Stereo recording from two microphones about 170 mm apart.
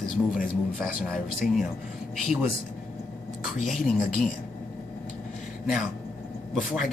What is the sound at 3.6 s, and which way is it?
Speech, centre (ahead or behind).